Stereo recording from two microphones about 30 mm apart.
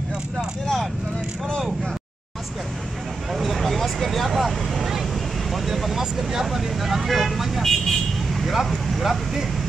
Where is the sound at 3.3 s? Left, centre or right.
Centre.